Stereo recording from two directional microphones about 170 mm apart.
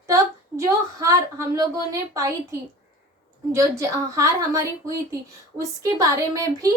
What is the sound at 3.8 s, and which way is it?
A woman's voice, 20° right (ahead or behind).